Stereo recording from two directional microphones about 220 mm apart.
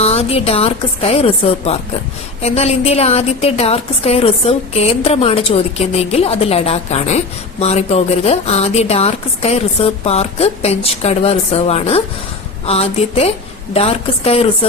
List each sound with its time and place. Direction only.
0.0 s a woman's voice: 25° left (ahead or behind)